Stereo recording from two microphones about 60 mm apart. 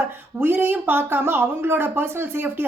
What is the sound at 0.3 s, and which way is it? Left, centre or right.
Speech, right.